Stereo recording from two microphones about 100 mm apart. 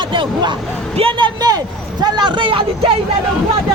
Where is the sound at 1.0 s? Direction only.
60° right (ahead or behind).